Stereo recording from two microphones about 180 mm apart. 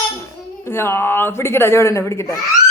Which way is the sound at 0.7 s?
15° left (ahead or behind).